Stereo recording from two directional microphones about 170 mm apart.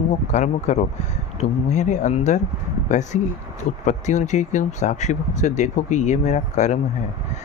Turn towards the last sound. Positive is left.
turn(degrees=45)  # may be behind; listen again after turning